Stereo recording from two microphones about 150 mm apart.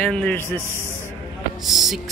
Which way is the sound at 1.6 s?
Centre (ahead or behind).